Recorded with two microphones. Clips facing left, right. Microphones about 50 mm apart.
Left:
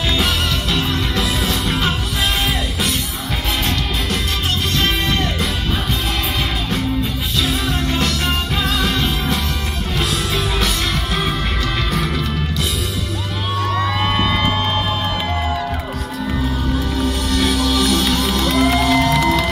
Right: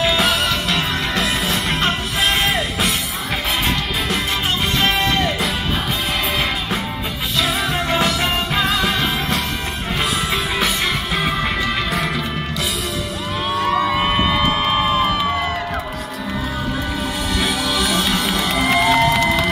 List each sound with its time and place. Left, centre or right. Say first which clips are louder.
0.0 s music: right 2 dB; centre
4.7 s music: right 2 dB; centre
7.9 s music: right 3 dB; centre
9.9 s music: even; right
11.9 s music: even; centre
13.6 s music: right 2 dB; centre
17.4 s music: left 3 dB; centre